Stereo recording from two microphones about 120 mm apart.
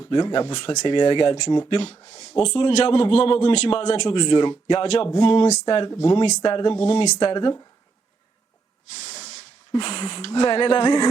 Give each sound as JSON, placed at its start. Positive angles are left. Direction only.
{"t": 0.0, "sound": "a man's voice", "side_deg": 40}
{"t": 4.0, "sound": "a man's voice", "side_deg": 40}
{"t": 9.0, "sound": "hiss", "side_deg": 45}
{"t": 9.3, "sound": "speech", "side_deg": 45}